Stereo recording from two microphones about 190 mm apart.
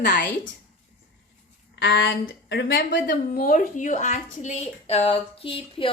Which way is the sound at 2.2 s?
55° left (ahead or behind).